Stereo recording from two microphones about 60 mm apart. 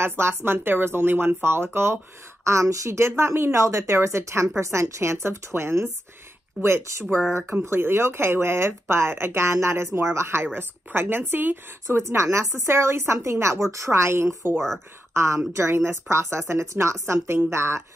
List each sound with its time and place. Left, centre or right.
0.0 s speech: right
2.4 s speech: right
12.0 s speech: right